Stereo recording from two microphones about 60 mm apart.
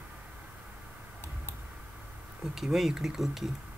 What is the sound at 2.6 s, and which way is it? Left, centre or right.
Speech, centre.